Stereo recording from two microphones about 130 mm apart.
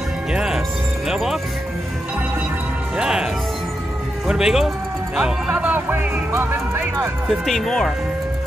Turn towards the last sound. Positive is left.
turn(degrees=5)  # may be behind; listen again after turning